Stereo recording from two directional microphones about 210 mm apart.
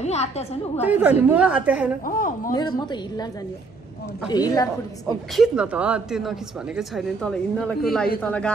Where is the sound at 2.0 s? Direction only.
40° left (ahead or behind).